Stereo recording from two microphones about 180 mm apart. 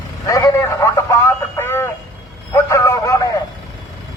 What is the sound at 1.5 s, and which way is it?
Radio, 15° left (ahead or behind).